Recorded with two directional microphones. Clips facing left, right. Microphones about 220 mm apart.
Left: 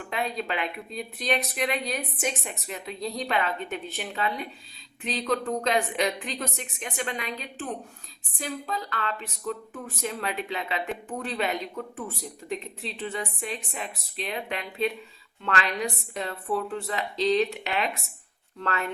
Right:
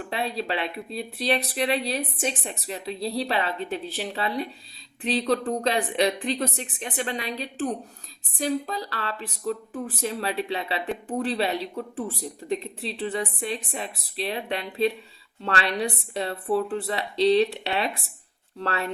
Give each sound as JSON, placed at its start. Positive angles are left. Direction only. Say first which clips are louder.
{"t": 0.1, "sound": "speech", "louder": "right 1 dB", "side_deg": -30}